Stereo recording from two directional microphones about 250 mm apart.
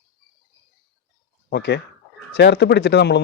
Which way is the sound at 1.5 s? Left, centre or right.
Left.